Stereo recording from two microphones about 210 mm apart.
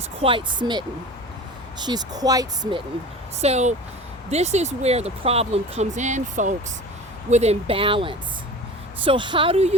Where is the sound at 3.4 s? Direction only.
30° right (ahead or behind).